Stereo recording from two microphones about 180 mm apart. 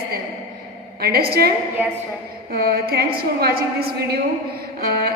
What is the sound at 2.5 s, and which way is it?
A woman's voice, 60° right (ahead or behind).